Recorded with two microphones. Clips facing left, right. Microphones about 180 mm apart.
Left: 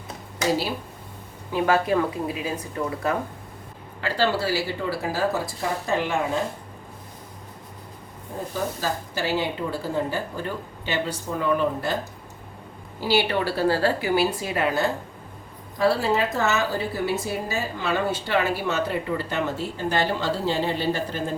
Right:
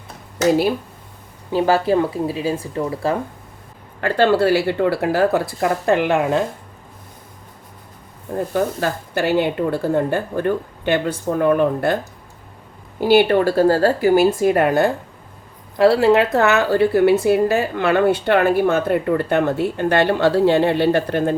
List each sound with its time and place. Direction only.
1.5 s speech: 30° right (ahead or behind)
4.0 s a woman's voice: 60° right (ahead or behind)
8.5 s a woman's voice: 60° right (ahead or behind)
13.0 s a woman's voice: 55° right (ahead or behind)
15.8 s a woman's voice: 70° right (ahead or behind)